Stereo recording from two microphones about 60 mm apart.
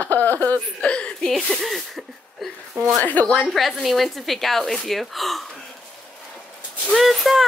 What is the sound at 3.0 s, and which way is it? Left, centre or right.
Speech, left.